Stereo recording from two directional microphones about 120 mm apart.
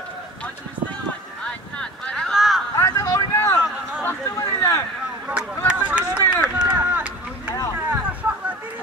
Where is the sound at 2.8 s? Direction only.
25° left (ahead or behind).